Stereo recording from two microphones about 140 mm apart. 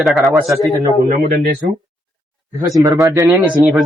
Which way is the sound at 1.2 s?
90° right.